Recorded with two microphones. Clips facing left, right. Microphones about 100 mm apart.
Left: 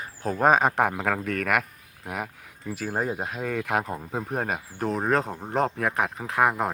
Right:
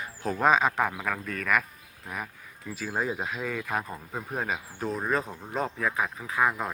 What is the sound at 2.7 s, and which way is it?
Speech, 50° left (ahead or behind).